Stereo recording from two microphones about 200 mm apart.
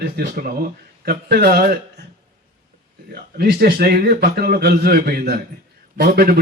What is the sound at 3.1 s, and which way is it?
A man's voice, 50° right (ahead or behind).